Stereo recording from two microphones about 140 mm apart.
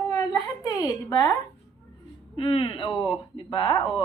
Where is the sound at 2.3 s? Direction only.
35° left (ahead or behind).